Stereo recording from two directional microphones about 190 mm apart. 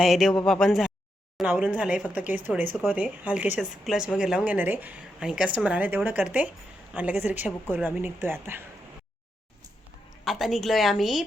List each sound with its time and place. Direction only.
0.0 s a woman's voice: centre (ahead or behind)
10.2 s a woman's voice: centre (ahead or behind)